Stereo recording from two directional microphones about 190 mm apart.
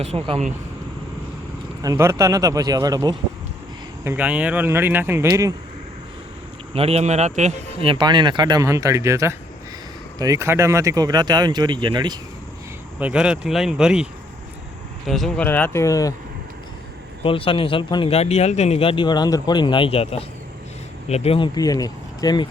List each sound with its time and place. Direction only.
0.0 s speech: 35° right (ahead or behind)
1.8 s speech: 15° right (ahead or behind)
6.7 s speech: 30° right (ahead or behind)
13.0 s speech: 5° right (ahead or behind); by 16.1 s 15° left (ahead or behind)
17.2 s speech: 30° left (ahead or behind)